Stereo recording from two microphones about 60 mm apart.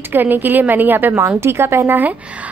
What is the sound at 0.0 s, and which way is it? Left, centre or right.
A woman's voice, right.